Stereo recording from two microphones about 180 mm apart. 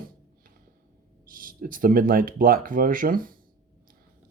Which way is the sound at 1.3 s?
50° right (ahead or behind).